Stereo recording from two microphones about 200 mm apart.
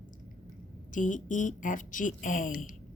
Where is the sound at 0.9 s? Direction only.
40° left (ahead or behind).